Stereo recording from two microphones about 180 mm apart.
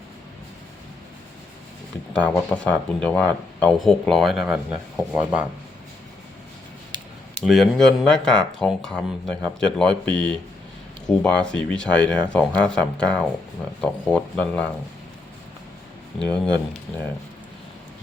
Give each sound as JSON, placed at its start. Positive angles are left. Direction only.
{"t": 2.1, "sound": "speech", "side_deg": 10}
{"t": 6.9, "sound": "a sound", "side_deg": -25}
{"t": 7.4, "sound": "speech", "side_deg": 0}
{"t": 16.1, "sound": "speech", "side_deg": 5}